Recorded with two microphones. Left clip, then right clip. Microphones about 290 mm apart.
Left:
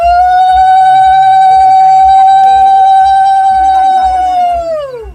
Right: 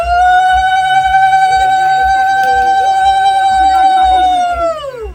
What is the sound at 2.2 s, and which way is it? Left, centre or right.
Music, centre.